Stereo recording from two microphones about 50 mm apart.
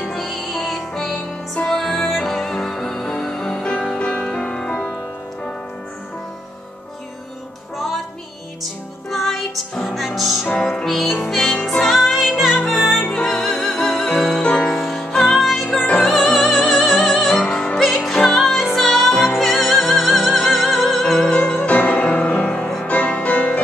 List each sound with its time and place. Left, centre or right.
0.1 s music: centre
9.1 s music: centre
10.6 s music: centre
10.9 s music: centre
14.4 s music: left
14.7 s music: centre
21.5 s music: left